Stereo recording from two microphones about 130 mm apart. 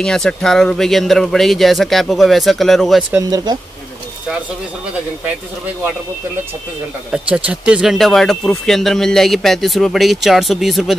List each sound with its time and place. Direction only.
0.0 s speech: 5° left (ahead or behind)
3.2 s speech: 30° right (ahead or behind)
7.1 s speech: 10° right (ahead or behind)